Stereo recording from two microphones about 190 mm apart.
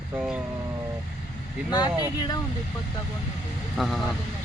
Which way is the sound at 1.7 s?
20° left (ahead or behind).